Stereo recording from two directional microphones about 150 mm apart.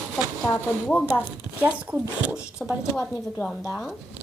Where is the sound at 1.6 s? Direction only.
10° right (ahead or behind).